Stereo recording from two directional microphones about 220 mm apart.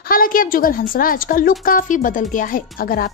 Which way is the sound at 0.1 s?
40° left (ahead or behind).